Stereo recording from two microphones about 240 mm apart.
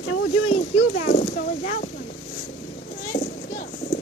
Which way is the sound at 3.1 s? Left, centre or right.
Left.